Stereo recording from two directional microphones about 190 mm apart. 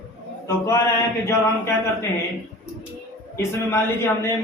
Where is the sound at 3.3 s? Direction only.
15° left (ahead or behind).